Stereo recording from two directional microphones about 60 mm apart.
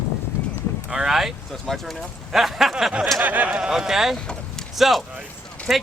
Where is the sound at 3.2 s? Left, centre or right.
Right.